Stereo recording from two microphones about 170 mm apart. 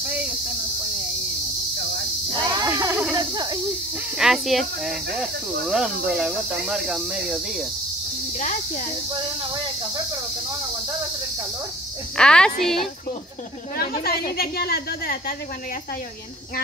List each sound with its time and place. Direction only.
2.3 s a sound: 25° right (ahead or behind)
3.2 s speech: 25° right (ahead or behind)
4.2 s speech: centre (ahead or behind)
8.4 s speech: 45° left (ahead or behind)
12.2 s speech: 5° left (ahead or behind)
13.7 s a woman's voice: 60° left (ahead or behind)